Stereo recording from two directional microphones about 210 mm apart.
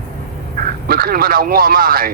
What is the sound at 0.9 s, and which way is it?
Speech, 45° right (ahead or behind).